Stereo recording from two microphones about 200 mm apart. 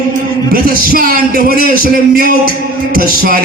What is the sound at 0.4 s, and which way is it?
A man's voice, 45° right (ahead or behind).